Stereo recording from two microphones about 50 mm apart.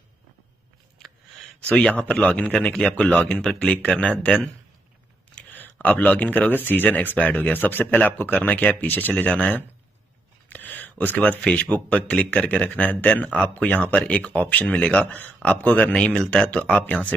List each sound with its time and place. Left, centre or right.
1.6 s speech: centre
3.3 s speech: centre
5.5 s speech: left
10.5 s a sound: left
11.4 s speech: left